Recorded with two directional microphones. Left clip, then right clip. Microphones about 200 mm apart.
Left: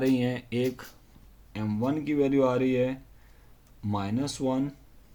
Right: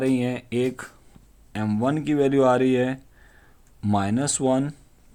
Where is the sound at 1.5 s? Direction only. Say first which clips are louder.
Right 5 dB; 55° right (ahead or behind).